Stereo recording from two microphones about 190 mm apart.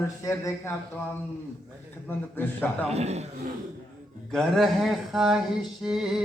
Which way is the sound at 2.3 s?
10° left (ahead or behind).